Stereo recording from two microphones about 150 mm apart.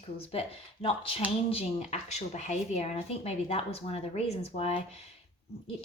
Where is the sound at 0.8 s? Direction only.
35° left (ahead or behind).